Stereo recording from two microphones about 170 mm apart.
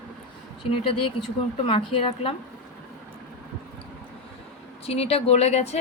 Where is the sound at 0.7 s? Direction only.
35° left (ahead or behind).